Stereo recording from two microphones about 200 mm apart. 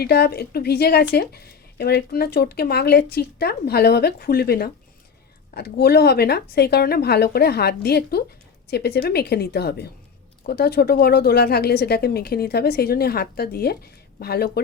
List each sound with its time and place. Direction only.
0.0 s a woman's voice: 50° left (ahead or behind)